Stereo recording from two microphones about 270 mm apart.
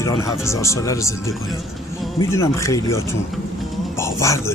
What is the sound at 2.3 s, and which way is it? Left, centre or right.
Speech, centre.